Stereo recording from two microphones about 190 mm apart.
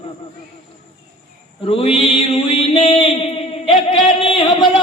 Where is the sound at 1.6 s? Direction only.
30° left (ahead or behind).